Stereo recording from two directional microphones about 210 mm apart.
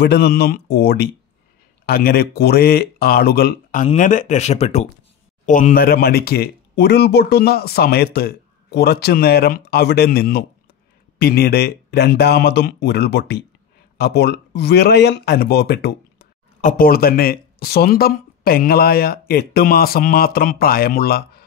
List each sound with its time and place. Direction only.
0.0 s speech: 50° left (ahead or behind)